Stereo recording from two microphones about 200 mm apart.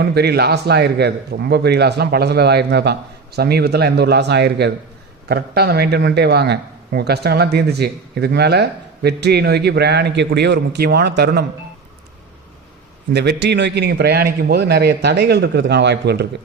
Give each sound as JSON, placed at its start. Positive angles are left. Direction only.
{"t": 0.0, "sound": "a man's voice", "side_deg": -55}
{"t": 13.1, "sound": "a man's voice", "side_deg": -55}